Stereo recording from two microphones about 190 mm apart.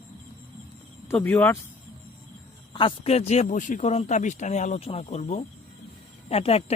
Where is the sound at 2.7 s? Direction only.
25° left (ahead or behind).